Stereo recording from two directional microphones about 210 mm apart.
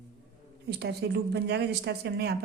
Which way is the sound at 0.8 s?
50° right (ahead or behind).